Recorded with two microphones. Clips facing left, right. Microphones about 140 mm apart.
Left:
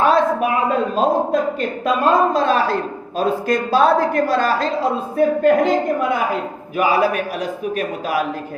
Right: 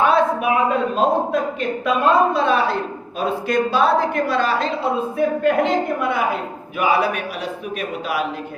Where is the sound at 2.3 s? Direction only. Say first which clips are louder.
Left 1 dB; 40° left (ahead or behind).